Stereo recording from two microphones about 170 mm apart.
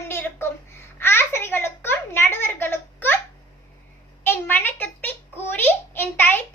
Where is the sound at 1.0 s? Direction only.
15° left (ahead or behind).